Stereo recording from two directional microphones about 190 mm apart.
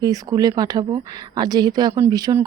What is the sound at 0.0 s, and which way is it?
Speech, 20° right (ahead or behind).